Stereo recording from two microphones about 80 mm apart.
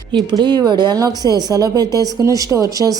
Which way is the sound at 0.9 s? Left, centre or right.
Right.